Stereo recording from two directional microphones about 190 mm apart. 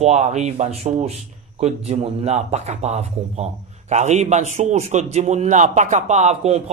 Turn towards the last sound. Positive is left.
turn(degrees=-35)  # may be behind; listen again after turning